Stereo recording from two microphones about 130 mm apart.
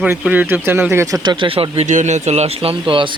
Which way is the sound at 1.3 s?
40° right (ahead or behind).